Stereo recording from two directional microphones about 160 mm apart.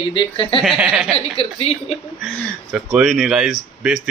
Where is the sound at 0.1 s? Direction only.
30° left (ahead or behind).